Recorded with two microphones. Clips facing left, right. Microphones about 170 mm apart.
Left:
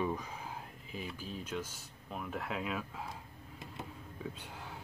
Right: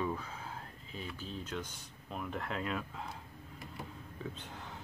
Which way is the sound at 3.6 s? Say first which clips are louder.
Even; 20° left (ahead or behind).